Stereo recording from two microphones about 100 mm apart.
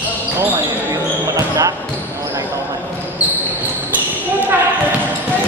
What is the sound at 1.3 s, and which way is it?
Speech, 35° right (ahead or behind).